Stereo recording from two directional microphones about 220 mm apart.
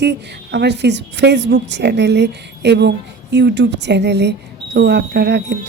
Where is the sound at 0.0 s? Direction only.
50° right (ahead or behind).